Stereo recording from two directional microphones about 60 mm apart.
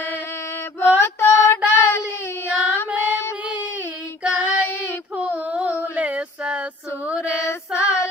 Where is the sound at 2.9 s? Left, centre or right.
Right.